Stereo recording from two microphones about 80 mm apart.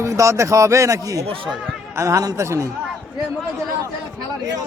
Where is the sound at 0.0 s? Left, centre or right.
Right.